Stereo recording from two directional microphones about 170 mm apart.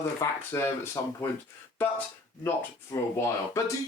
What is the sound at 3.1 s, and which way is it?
Speech, 15° left (ahead or behind).